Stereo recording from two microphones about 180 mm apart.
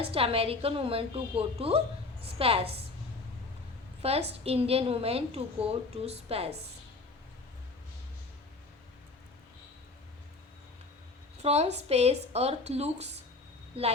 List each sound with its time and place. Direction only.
0.0 s a woman's voice: 30° right (ahead or behind)
4.0 s a woman's voice: 35° right (ahead or behind)
11.4 s a woman's voice: 35° right (ahead or behind)